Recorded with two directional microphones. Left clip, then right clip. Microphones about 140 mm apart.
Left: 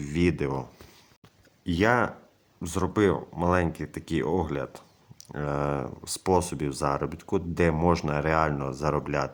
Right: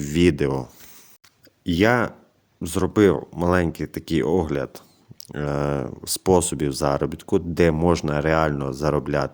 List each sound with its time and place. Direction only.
0.0 s speech: 30° right (ahead or behind)